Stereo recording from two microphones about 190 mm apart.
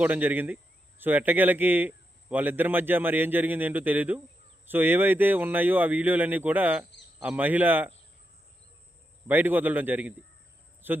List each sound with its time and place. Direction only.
0.0 s speech: 10° right (ahead or behind)
9.2 s a man's voice: 10° right (ahead or behind)